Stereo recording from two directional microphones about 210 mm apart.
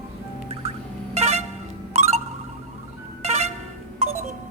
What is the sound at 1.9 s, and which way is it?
Music, 30° right (ahead or behind).